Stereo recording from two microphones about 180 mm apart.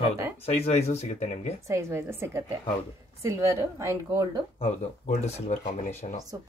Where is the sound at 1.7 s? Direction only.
15° right (ahead or behind).